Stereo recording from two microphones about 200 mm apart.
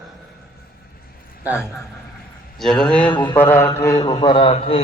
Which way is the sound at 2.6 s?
Centre (ahead or behind).